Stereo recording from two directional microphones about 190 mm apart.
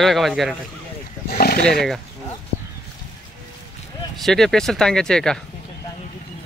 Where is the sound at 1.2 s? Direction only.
50° left (ahead or behind).